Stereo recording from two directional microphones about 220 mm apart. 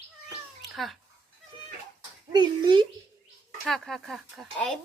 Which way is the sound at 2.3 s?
20° right (ahead or behind).